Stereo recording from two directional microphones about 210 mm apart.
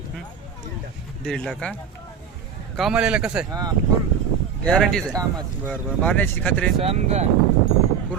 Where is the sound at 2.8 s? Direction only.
5° right (ahead or behind).